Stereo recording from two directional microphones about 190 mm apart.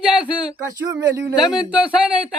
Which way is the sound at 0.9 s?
15° right (ahead or behind).